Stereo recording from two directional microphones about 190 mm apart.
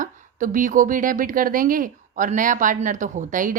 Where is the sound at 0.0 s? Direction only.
45° right (ahead or behind).